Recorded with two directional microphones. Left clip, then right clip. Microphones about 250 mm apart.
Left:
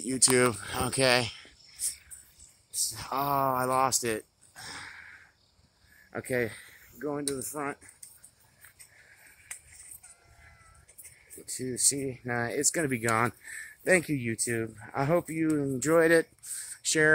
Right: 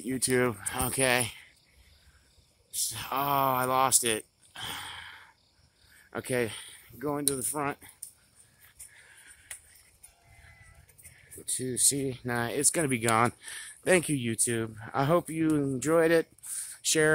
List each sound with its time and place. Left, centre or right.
0.0 s speech: centre
2.7 s speech: centre
4.0 s speech: centre
4.6 s a sound: centre
6.0 s speech: centre
11.4 s speech: centre
15.8 s speech: centre